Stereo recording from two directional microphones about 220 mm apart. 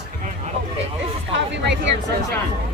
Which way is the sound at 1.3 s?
55° right (ahead or behind).